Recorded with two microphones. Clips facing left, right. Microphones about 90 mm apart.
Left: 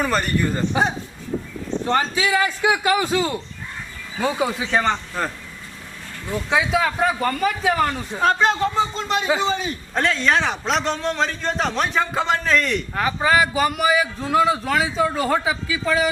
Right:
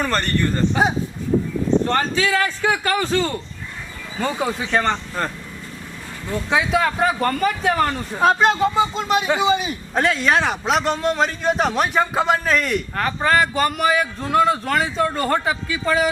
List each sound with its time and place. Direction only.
0.0 s speech: 5° left (ahead or behind)
1.8 s a man's voice: 10° left (ahead or behind)
6.3 s a man's voice: centre (ahead or behind)